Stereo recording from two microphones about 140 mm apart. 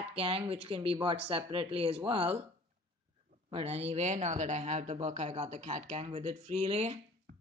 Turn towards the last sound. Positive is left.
turn(degrees=-45)  # may be behind; listen again after turning